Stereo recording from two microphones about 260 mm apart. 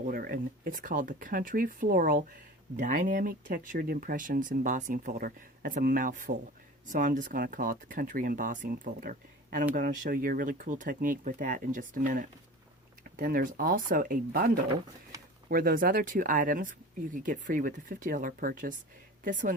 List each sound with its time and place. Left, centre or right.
0.1 s speech: right